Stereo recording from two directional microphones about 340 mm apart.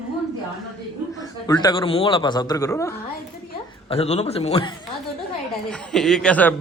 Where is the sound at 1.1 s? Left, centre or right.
Centre.